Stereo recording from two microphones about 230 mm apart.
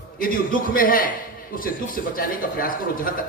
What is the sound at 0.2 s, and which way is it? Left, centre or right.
A man's voice, left.